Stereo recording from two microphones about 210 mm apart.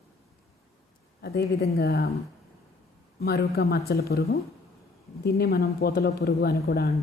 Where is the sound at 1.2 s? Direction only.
50° left (ahead or behind).